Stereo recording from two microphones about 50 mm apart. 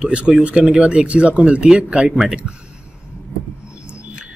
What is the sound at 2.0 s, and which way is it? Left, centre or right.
Speech, centre.